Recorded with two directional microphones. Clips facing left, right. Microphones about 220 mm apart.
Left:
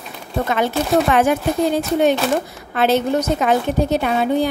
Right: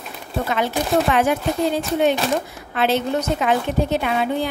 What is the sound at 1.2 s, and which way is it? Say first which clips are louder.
A woman's voice: left 3 dB; 45° left (ahead or behind).